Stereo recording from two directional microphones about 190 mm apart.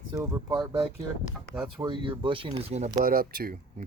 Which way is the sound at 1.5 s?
10° right (ahead or behind).